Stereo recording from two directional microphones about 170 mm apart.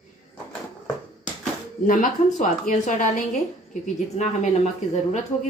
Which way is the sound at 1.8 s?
50° left (ahead or behind).